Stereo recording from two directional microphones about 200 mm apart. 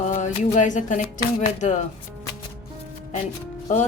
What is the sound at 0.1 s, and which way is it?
A woman's voice, 35° left (ahead or behind).